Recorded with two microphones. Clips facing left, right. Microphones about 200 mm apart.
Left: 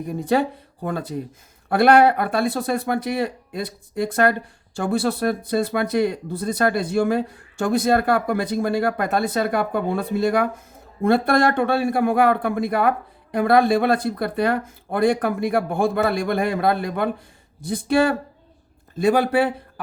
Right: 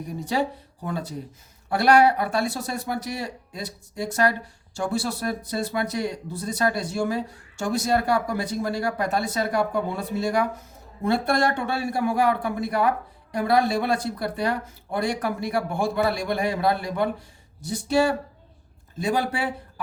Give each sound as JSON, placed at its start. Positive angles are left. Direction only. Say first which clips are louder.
{"t": 0.1, "sound": "speech", "louder": "left 5 dB", "side_deg": 55}